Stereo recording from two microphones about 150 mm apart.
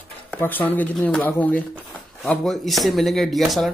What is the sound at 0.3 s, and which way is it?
Speech, 10° left (ahead or behind).